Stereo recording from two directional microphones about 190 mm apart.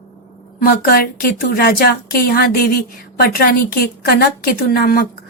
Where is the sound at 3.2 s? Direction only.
55° left (ahead or behind).